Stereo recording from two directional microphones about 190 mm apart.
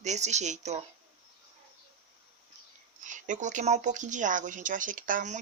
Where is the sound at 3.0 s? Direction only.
40° right (ahead or behind).